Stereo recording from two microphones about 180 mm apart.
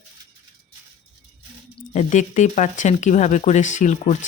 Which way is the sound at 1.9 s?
40° left (ahead or behind).